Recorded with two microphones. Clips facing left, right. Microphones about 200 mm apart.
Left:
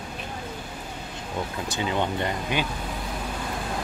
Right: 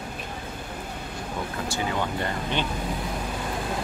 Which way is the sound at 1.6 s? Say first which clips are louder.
Left 2 dB; 20° left (ahead or behind).